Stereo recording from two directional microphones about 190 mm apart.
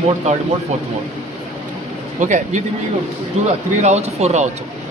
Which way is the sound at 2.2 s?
40° right (ahead or behind).